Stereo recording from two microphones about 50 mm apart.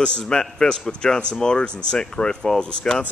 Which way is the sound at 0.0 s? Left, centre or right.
Centre.